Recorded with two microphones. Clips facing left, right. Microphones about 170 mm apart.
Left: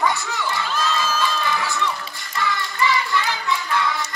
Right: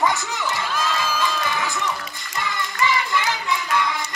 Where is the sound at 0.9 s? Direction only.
15° right (ahead or behind).